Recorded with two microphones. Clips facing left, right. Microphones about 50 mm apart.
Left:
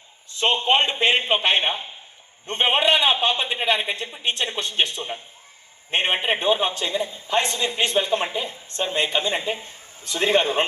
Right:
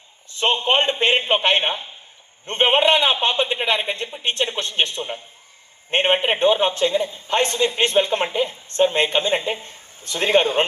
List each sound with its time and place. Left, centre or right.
0.3 s a man's voice: right